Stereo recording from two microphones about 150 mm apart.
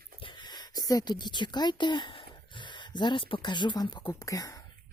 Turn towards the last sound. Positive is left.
turn(degrees=25)  # may be behind; listen again after turning